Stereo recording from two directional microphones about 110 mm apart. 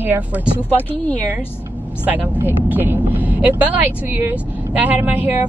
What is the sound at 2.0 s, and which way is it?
Speech, 15° right (ahead or behind).